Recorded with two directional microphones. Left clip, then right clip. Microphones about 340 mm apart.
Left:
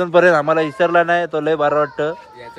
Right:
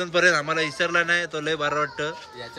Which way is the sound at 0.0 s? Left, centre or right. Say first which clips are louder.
Left 8 dB; centre.